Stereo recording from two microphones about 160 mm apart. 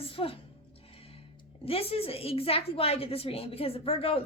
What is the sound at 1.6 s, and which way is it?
A woman's voice, 35° left (ahead or behind).